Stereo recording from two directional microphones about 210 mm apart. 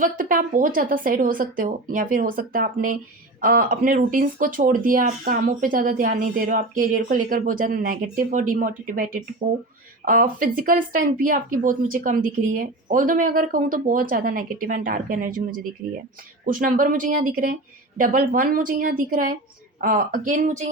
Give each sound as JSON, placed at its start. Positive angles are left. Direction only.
{"t": 0.0, "sound": "speech", "side_deg": -40}